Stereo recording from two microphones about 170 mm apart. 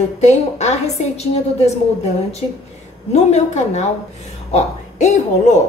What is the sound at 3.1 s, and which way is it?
A woman's voice, 40° left (ahead or behind).